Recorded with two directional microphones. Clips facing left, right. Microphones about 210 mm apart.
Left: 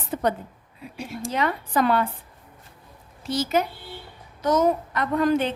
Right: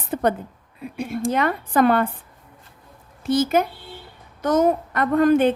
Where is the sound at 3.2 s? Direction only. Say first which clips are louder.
Right 5 dB; 50° right (ahead or behind).